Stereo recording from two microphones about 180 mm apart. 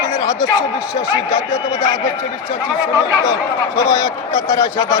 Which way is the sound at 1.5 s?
20° left (ahead or behind).